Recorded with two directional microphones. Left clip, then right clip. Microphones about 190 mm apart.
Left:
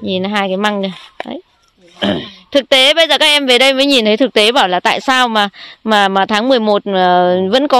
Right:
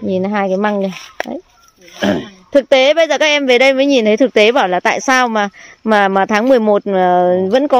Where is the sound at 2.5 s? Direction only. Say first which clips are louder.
Even; 5° left (ahead or behind).